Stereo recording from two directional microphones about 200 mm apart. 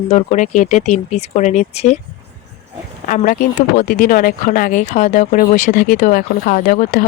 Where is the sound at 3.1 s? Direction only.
45° left (ahead or behind).